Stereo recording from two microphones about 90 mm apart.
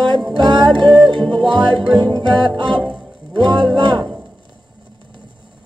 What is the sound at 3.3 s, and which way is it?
Speech, 60° right (ahead or behind).